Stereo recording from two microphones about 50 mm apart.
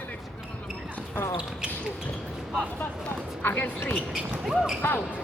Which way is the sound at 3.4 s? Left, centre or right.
Left.